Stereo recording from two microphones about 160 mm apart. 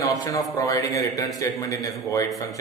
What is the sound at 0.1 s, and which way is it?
A man's voice, 20° left (ahead or behind).